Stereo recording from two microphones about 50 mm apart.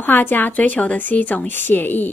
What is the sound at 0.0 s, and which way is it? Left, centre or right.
A woman's voice, left.